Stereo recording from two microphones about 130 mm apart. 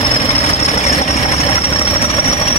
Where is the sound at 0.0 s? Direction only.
50° left (ahead or behind).